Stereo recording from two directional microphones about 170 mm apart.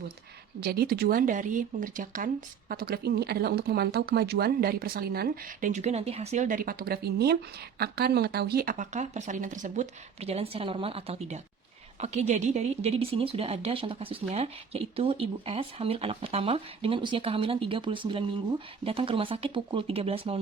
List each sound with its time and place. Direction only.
0.6 s speech: 65° right (ahead or behind); by 20.4 s 35° right (ahead or behind)